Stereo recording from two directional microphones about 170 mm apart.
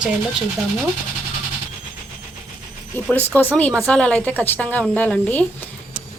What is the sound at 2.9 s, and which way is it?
A woman's voice, 10° left (ahead or behind).